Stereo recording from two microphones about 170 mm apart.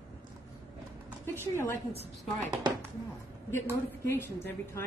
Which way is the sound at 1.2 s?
15° left (ahead or behind).